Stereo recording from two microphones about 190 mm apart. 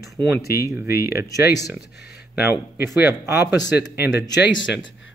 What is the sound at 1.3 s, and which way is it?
Speech, 20° left (ahead or behind).